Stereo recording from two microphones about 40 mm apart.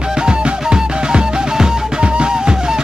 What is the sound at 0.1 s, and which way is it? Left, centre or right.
Music, right.